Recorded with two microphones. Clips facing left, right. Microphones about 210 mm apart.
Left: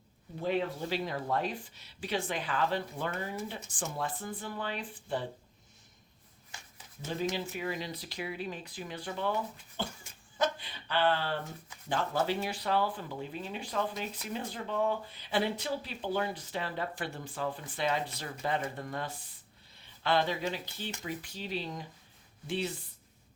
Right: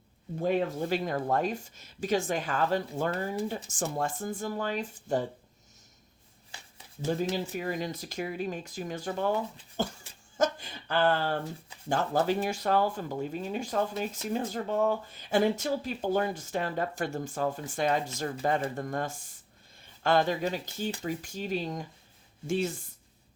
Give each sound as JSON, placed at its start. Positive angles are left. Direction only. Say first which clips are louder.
{"t": 0.4, "sound": "speech", "louder": "right 4 dB", "side_deg": -45}
{"t": 6.5, "sound": "speech", "louder": "right 1 dB", "side_deg": -35}
{"t": 9.7, "sound": "a sound", "louder": "right 7 dB", "side_deg": -40}
{"t": 11.9, "sound": "speech", "louder": "right 4 dB", "side_deg": -45}